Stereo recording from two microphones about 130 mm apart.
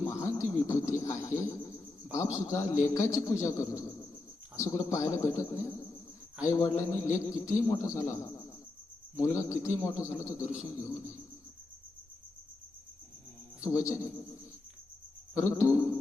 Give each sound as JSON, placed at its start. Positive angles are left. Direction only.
{"t": 0.0, "sound": "a sound", "side_deg": 20}
{"t": 0.3, "sound": "insect", "side_deg": 25}
{"t": 2.1, "sound": "a man's voice", "side_deg": 20}
{"t": 13.7, "sound": "a man's voice", "side_deg": 25}
{"t": 15.4, "sound": "a man's voice", "side_deg": 20}